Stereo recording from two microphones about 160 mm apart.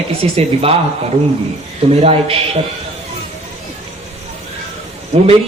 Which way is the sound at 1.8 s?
35° right (ahead or behind).